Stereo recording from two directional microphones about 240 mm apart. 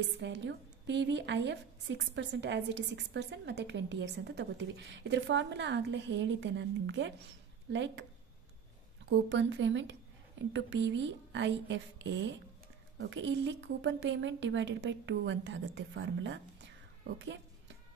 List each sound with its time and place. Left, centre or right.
0.2 s a woman's voice: right
9.1 s a woman's voice: right